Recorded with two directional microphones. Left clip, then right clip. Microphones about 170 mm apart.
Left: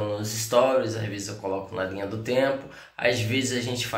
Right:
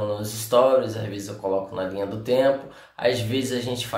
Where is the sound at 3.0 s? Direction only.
5° right (ahead or behind).